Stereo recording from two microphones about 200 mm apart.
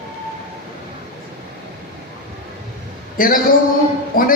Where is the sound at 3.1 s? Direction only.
45° left (ahead or behind).